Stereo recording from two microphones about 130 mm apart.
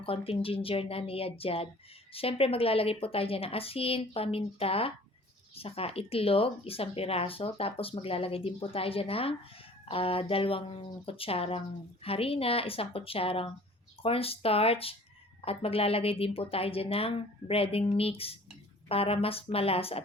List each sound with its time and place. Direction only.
0.0 s speech: 45° left (ahead or behind)